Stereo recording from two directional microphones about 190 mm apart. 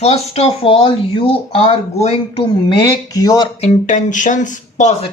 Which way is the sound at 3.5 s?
40° left (ahead or behind).